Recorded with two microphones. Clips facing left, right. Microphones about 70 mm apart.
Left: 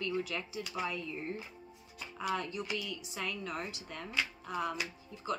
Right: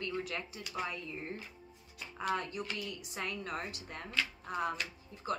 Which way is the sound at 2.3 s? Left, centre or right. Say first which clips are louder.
Left 2 dB; right.